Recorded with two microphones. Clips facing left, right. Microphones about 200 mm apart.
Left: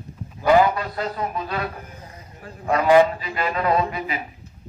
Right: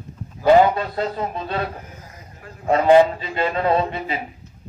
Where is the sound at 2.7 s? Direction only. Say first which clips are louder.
Right 2 dB; 25° right (ahead or behind).